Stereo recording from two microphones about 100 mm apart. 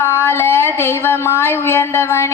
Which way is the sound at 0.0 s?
25° left (ahead or behind).